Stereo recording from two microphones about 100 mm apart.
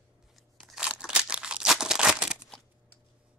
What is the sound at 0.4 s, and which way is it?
Crumpling, centre (ahead or behind).